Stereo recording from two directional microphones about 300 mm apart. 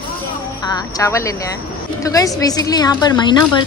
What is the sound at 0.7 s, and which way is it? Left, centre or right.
Speech, centre.